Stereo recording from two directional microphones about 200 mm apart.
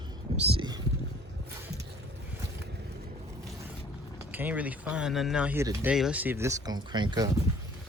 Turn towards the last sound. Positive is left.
turn(degrees=-20)  # may be behind; listen again after turning